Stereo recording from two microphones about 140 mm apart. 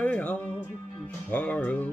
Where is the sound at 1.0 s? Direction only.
10° left (ahead or behind).